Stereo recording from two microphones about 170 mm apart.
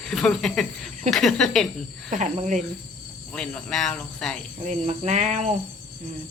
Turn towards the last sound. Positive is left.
turn(degrees=-45)  # may be behind; listen again after turning